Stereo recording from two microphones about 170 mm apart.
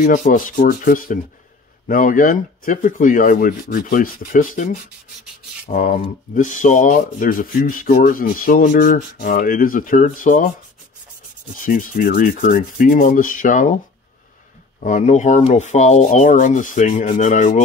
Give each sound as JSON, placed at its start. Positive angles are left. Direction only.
{"t": 0.0, "sound": "speech", "side_deg": 50}
{"t": 5.7, "sound": "speech", "side_deg": 50}
{"t": 11.5, "sound": "speech", "side_deg": 50}
{"t": 14.8, "sound": "speech", "side_deg": 50}